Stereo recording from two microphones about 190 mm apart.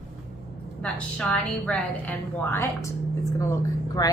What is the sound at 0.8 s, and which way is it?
A woman's voice, 5° left (ahead or behind).